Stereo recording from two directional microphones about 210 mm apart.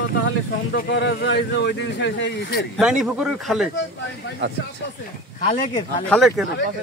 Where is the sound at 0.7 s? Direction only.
55° left (ahead or behind).